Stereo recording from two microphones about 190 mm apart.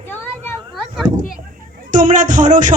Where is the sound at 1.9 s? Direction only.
40° right (ahead or behind).